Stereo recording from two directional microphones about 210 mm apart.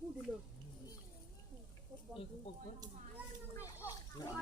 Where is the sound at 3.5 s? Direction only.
15° left (ahead or behind).